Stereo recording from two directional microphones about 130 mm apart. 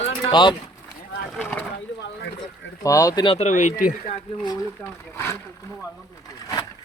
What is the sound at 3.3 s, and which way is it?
Speech, 65° left (ahead or behind).